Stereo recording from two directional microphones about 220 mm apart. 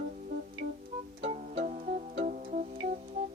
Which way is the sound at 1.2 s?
25° right (ahead or behind).